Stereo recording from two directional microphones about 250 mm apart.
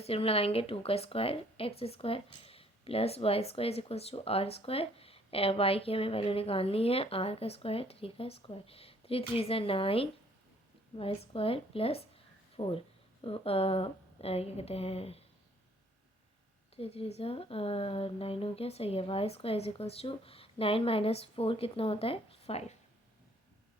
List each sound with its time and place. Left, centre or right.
0.0 s speech: left
16.7 s speech: left